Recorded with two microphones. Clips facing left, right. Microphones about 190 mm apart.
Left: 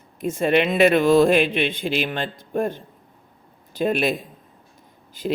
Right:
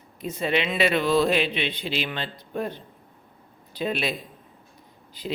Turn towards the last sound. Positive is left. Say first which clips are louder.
# left 7 dB
turn(degrees=45)  # may be behind; listen again after turning